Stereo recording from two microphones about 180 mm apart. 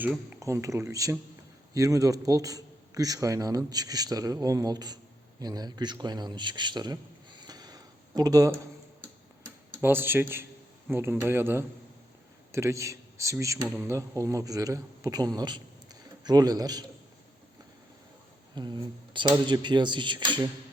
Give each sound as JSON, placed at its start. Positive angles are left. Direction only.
{"t": 0.3, "sound": "a man's voice", "side_deg": -15}
{"t": 9.8, "sound": "a man's voice", "side_deg": -10}
{"t": 18.5, "sound": "a man's voice", "side_deg": -25}